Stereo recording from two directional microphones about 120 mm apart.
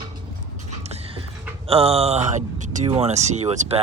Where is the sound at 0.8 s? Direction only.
60° right (ahead or behind).